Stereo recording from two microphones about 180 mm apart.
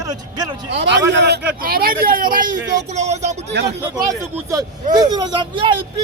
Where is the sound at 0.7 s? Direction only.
75° right (ahead or behind); by 3.3 s 40° right (ahead or behind).